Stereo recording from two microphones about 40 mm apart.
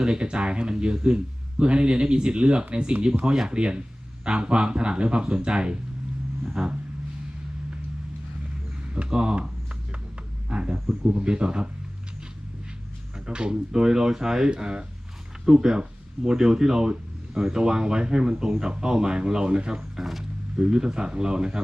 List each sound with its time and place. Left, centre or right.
0.0 s speech: right
9.0 s speech: centre
10.5 s speech: right
13.2 s speech: right